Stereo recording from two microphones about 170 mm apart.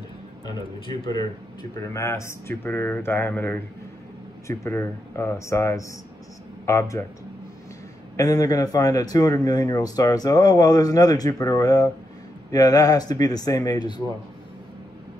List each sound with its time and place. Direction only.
0.5 s speech: 25° left (ahead or behind)
8.2 s speech: 20° left (ahead or behind)